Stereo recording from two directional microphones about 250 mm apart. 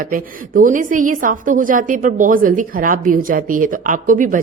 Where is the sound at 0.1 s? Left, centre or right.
Right.